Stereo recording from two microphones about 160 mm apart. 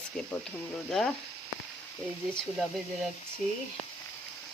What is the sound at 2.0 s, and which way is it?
Speech, 30° left (ahead or behind).